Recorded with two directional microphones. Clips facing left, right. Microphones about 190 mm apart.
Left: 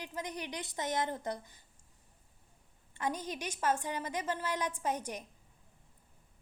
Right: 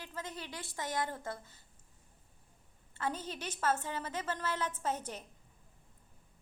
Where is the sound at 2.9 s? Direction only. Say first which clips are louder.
Left 2 dB; 15° left (ahead or behind).